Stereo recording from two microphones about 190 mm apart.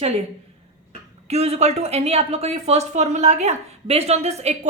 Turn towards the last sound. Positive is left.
turn(degrees=-35)  # may be behind; listen again after turning